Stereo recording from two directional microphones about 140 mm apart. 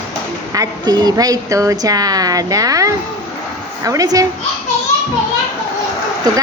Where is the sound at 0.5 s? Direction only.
30° right (ahead or behind).